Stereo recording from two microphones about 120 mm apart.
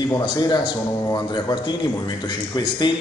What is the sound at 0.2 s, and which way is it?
A man's voice, 35° left (ahead or behind).